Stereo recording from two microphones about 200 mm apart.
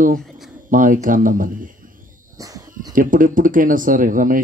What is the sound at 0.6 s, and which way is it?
Speech, 40° right (ahead or behind).